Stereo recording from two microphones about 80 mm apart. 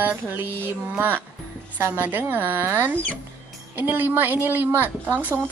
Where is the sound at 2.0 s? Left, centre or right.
Right.